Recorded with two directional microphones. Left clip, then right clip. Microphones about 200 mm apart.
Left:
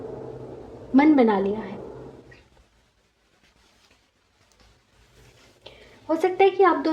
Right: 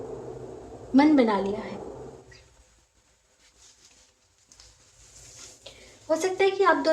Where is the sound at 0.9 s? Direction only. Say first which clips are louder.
Left 2 dB; 40° left (ahead or behind).